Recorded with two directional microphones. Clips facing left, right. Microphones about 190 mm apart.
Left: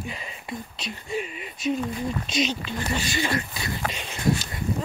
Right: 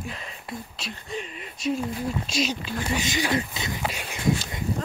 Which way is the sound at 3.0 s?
15° right (ahead or behind).